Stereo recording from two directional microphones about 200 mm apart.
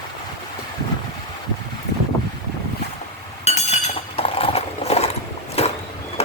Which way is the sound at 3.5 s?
35° left (ahead or behind).